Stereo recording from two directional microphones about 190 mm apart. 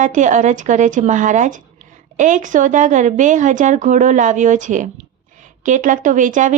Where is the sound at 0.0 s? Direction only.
40° right (ahead or behind).